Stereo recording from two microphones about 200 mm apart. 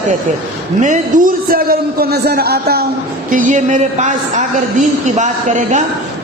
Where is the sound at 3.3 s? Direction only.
40° right (ahead or behind).